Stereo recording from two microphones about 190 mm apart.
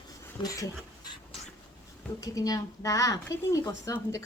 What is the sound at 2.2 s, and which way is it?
Speech, 20° left (ahead or behind).